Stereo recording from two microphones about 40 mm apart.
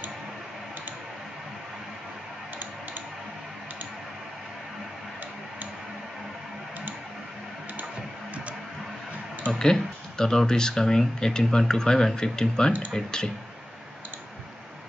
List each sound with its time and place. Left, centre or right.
9.5 s speech: centre